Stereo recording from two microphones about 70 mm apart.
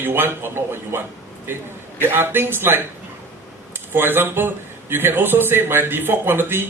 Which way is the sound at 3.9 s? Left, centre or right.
Right.